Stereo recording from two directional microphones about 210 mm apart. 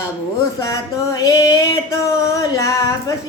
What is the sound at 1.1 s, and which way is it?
Child singing, 15° left (ahead or behind).